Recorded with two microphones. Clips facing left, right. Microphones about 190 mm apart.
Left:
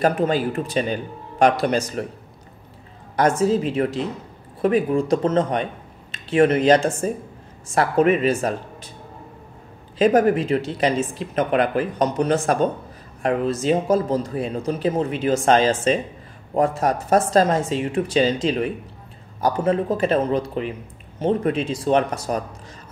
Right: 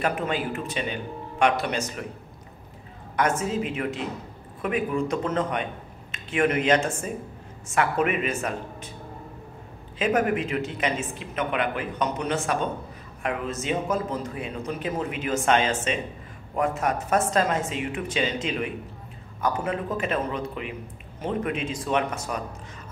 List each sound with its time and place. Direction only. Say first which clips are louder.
0.0 s speech: left 7 dB; 35° left (ahead or behind)
3.2 s speech: left 7 dB; 35° left (ahead or behind)
9.9 s speech: left 7 dB; 35° left (ahead or behind)